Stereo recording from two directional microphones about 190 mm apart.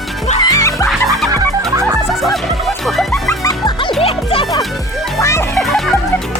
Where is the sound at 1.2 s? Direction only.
15° right (ahead or behind).